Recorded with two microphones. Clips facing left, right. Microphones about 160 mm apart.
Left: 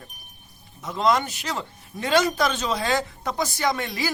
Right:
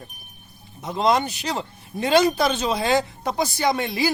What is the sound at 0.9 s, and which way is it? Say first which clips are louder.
Speech: right 2 dB; 20° right (ahead or behind).